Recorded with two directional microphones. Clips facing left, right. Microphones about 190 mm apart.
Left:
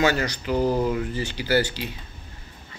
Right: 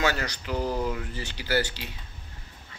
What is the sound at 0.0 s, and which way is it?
Speech, 5° left (ahead or behind).